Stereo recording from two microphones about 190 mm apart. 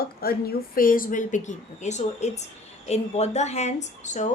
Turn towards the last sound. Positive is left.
turn(degrees=40)  # may be behind; listen again after turning